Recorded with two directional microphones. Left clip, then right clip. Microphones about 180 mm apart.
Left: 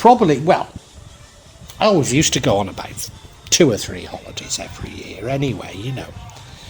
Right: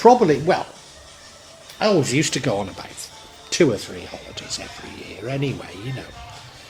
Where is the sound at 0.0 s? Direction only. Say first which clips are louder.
Left 2 dB; 35° left (ahead or behind).